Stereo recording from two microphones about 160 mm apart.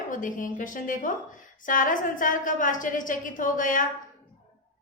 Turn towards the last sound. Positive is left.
turn(degrees=55)  # may be behind; listen again after turning